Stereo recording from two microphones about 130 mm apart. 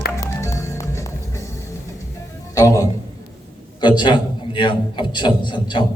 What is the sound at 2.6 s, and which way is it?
A man's voice, 25° left (ahead or behind).